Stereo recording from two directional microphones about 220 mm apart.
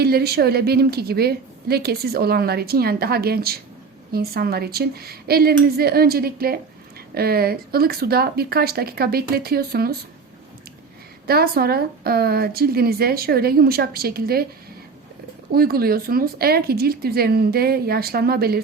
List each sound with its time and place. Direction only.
0.0 s a woman's voice: 45° right (ahead or behind)
11.3 s a woman's voice: 45° right (ahead or behind)
15.5 s a woman's voice: 45° right (ahead or behind)